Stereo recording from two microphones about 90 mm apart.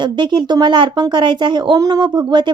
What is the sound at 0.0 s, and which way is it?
Speech, 60° right (ahead or behind).